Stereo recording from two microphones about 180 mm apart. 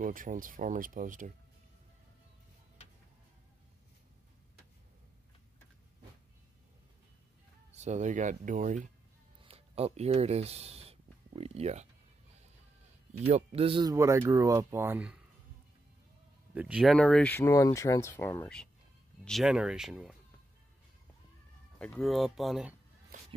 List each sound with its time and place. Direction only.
0.0 s speech: 50° right (ahead or behind)
7.7 s speech: 40° right (ahead or behind)
9.4 s speech: 35° right (ahead or behind)
13.3 s speech: 30° right (ahead or behind)
13.9 s speech: 15° right (ahead or behind)
16.5 s speech: 5° right (ahead or behind); by 18.6 s 15° left (ahead or behind)
19.2 s speech: centre (ahead or behind)
21.7 s speech: 5° left (ahead or behind)
23.1 s shuffle: 50° right (ahead or behind)